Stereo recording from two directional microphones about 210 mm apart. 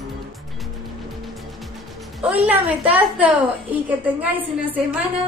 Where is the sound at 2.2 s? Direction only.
30° right (ahead or behind).